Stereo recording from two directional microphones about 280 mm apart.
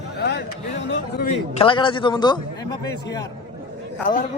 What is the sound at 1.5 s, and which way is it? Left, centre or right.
A man's voice, centre.